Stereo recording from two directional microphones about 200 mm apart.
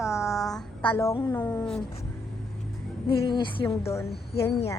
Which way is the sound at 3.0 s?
25° left (ahead or behind).